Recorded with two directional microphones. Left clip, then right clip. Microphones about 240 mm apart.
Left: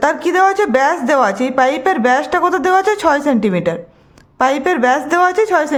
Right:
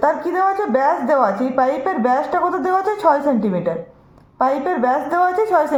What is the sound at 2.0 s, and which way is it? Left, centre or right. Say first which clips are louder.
A woman's voice: left 2 dB; left.